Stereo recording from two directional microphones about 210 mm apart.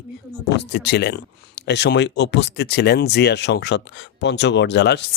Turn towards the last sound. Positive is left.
turn(degrees=55)  # may be behind; listen again after turning